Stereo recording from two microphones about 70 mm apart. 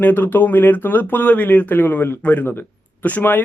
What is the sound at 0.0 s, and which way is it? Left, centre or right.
Speech, left.